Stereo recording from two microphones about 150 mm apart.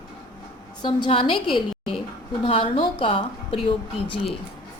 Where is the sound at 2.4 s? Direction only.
35° left (ahead or behind).